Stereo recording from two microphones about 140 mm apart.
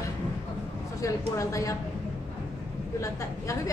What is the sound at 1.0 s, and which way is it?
Speech, 20° left (ahead or behind).